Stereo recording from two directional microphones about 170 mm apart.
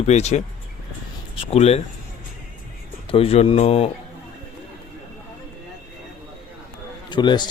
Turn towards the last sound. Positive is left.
turn(degrees=25)  # may be behind; listen again after turning